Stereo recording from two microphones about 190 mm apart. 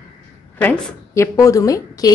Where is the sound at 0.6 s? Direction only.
10° left (ahead or behind).